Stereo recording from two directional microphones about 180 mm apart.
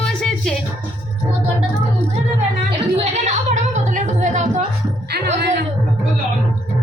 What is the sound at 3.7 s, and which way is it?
Music, 45° right (ahead or behind).